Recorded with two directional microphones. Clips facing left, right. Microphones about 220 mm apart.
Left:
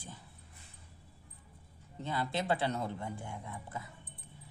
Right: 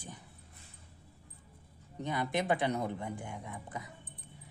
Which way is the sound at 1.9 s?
15° right (ahead or behind).